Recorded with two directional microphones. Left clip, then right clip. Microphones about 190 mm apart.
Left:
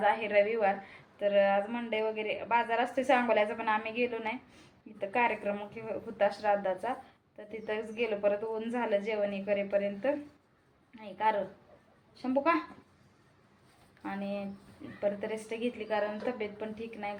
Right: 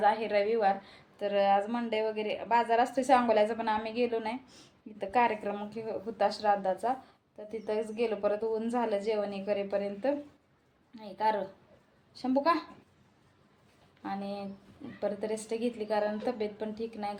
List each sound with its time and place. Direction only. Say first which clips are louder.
0.0 s a woman's voice: even; 20° right (ahead or behind)
14.0 s a woman's voice: even; 20° right (ahead or behind)